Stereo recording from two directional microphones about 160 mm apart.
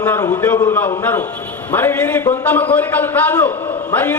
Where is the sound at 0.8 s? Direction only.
10° left (ahead or behind).